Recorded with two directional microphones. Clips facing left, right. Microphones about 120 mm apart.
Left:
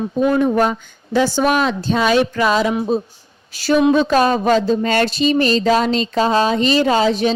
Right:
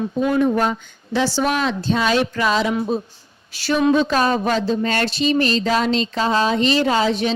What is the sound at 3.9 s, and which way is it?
A woman's voice, 45° left (ahead or behind).